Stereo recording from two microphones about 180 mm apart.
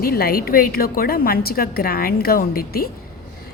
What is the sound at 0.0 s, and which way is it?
A woman's voice, 55° left (ahead or behind).